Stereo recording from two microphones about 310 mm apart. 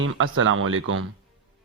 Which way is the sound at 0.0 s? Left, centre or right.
Right.